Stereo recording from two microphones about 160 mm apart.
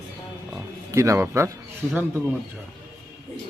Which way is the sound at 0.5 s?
15° right (ahead or behind).